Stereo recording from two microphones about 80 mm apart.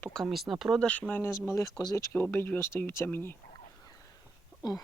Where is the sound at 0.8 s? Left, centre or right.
Centre.